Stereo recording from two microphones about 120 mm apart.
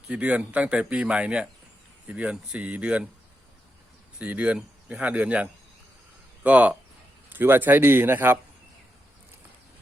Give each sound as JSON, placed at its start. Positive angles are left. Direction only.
{"t": 0.1, "sound": "speech", "side_deg": -10}
{"t": 4.2, "sound": "speech", "side_deg": -10}